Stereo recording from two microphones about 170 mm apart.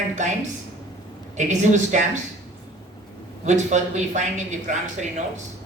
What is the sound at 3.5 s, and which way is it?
A woman's voice, 45° right (ahead or behind).